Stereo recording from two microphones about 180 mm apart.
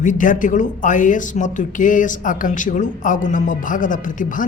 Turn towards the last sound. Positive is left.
turn(degrees=45)  # may be behind; listen again after turning